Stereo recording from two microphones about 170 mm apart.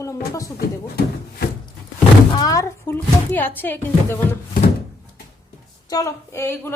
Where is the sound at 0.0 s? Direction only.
20° left (ahead or behind).